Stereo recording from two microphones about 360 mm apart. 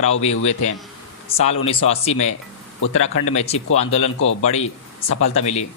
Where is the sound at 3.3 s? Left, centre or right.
Centre.